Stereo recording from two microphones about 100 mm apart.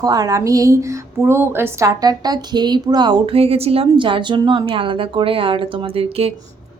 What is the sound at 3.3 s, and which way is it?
A woman's voice, 80° right.